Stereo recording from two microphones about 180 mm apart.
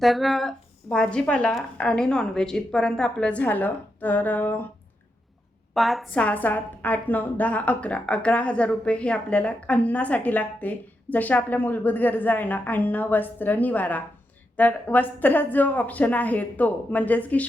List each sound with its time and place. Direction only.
0.0 s a woman's voice: centre (ahead or behind)
5.7 s a woman's voice: centre (ahead or behind)